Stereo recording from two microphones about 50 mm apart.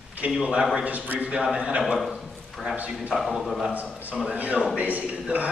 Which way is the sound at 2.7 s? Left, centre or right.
Right.